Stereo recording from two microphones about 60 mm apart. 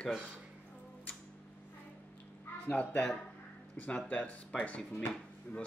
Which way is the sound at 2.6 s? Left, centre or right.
Left.